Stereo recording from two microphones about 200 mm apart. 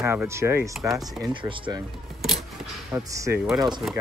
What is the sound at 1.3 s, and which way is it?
Speech, 25° right (ahead or behind).